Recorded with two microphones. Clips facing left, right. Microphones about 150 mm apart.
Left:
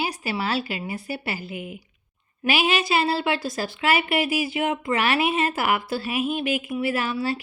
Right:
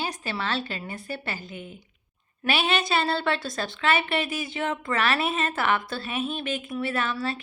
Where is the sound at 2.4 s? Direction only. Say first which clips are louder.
Left 3 dB; 5° left (ahead or behind).